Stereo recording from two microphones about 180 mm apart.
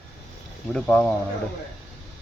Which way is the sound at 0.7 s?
5° left (ahead or behind).